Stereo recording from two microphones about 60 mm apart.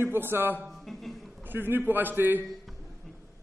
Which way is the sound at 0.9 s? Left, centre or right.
Centre.